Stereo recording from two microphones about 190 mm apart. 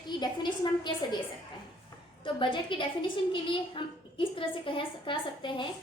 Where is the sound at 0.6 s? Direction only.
25° left (ahead or behind).